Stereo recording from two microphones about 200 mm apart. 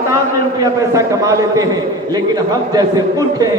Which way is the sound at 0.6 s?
15° right (ahead or behind).